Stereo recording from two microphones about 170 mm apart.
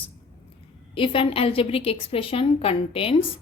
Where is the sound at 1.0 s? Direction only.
30° left (ahead or behind).